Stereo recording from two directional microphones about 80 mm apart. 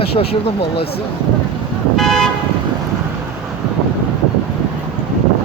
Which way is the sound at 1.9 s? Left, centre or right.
Centre.